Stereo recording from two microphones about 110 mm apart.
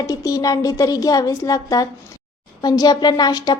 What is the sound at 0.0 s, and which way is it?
A woman's voice, 30° left (ahead or behind).